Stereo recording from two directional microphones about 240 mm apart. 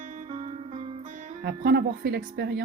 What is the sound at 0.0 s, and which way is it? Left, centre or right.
Music, right.